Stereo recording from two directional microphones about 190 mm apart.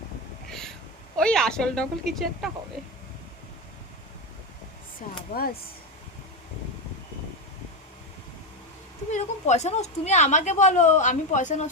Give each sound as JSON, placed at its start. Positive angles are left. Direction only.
{"t": 1.1, "sound": "a woman's voice", "side_deg": 5}
{"t": 9.0, "sound": "a woman's voice", "side_deg": 40}